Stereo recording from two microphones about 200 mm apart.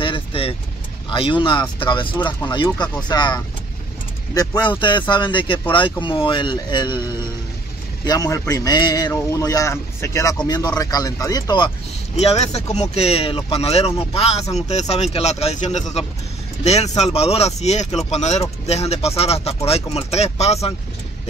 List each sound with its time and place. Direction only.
0.0 s vehicle: 25° left (ahead or behind)
1.1 s a man's voice: 25° left (ahead or behind)
12.2 s speech: 30° left (ahead or behind)